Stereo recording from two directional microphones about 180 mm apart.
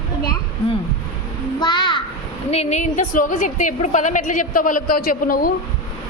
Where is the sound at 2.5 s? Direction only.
35° left (ahead or behind).